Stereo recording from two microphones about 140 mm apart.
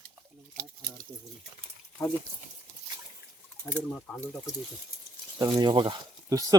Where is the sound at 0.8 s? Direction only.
90° right.